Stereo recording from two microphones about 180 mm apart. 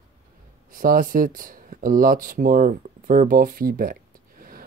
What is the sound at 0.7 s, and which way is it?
Speech, 50° right (ahead or behind).